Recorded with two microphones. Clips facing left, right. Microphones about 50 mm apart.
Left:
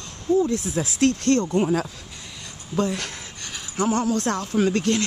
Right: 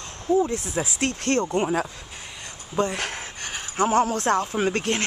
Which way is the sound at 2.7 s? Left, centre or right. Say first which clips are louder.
Left 1 dB; centre.